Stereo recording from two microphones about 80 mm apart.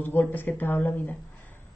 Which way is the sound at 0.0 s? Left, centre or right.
Left.